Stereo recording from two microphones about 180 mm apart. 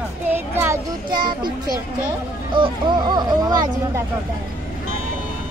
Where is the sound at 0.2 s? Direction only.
10° right (ahead or behind).